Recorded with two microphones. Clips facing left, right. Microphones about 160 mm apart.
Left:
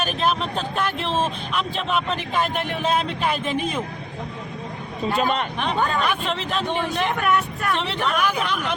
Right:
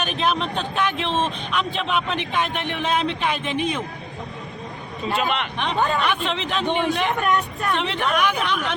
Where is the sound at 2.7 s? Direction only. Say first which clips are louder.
Left 1 dB; 40° left (ahead or behind).